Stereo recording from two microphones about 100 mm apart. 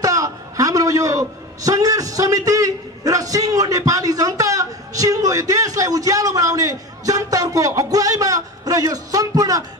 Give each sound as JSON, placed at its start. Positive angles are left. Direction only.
{"t": 0.0, "sound": "a man's voice", "side_deg": -35}